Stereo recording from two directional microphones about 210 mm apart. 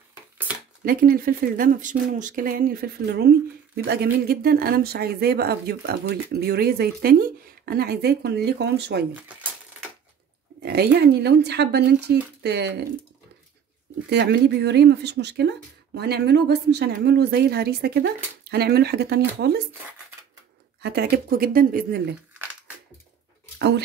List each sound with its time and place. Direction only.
0.1 s a sound: 10° right (ahead or behind)
0.8 s speech: 45° right (ahead or behind)
9.1 s typewriter: 5° right (ahead or behind)
10.6 s speech: 50° right (ahead or behind)
14.0 s speech: 50° right (ahead or behind)
20.8 s speech: 50° right (ahead or behind)